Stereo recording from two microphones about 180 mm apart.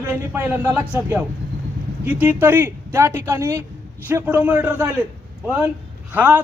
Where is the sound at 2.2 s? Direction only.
10° right (ahead or behind).